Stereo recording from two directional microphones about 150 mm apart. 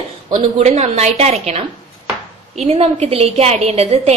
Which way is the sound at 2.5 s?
40° right (ahead or behind).